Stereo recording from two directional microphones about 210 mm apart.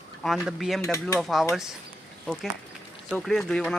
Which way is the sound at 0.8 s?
15° left (ahead or behind).